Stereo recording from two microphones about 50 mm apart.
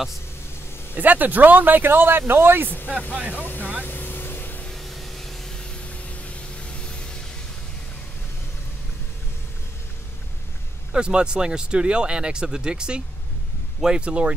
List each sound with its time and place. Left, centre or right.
0.9 s speech: right
3.2 s speech: right
3.8 s vehicle: left
4.6 s vehicle: centre
5.6 s music: left
10.9 s speech: centre